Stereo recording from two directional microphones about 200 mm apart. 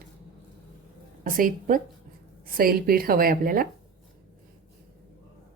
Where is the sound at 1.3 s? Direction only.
45° right (ahead or behind).